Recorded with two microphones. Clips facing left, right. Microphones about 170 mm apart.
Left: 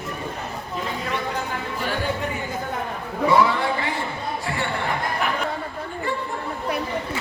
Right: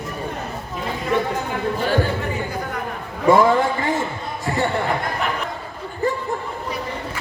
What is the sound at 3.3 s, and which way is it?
Speech, 45° right (ahead or behind).